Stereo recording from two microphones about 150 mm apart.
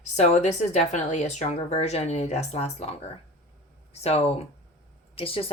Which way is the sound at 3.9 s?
45° left (ahead or behind).